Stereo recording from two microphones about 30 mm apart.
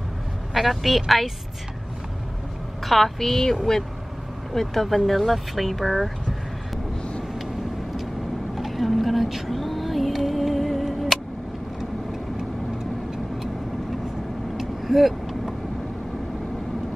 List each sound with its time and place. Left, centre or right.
0.6 s speech: centre
2.8 s a woman's voice: centre
8.5 s speech: centre
10.1 s music: centre
11.1 s a sound: centre
11.8 s vehicle: centre
14.6 s vehicle: centre